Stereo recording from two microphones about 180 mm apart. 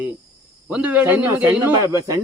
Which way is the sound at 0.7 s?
10° right (ahead or behind).